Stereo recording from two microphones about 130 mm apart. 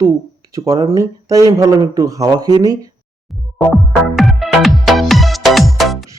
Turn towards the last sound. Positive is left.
turn(degrees=0)  # may be behind; listen again after turning